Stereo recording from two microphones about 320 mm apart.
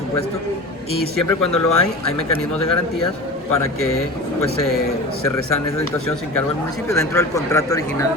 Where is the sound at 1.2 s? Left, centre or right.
Left.